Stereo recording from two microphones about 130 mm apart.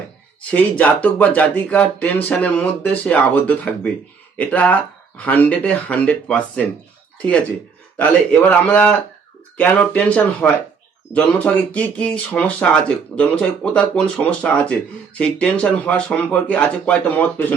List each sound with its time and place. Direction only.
0.5 s speech: 10° left (ahead or behind)